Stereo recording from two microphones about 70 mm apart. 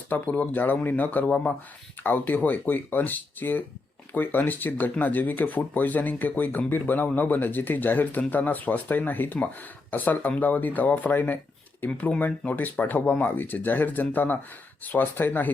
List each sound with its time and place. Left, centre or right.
0.1 s speech: left